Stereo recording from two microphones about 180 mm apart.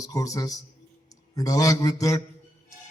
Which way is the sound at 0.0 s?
20° left (ahead or behind).